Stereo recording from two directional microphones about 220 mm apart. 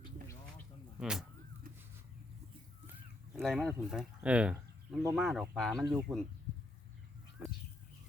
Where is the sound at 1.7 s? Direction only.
40° right (ahead or behind).